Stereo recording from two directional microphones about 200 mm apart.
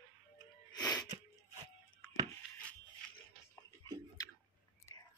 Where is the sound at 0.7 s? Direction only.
20° left (ahead or behind).